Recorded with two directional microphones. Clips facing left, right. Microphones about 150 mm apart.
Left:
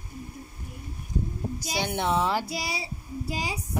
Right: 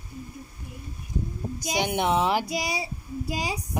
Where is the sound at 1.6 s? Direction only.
15° right (ahead or behind).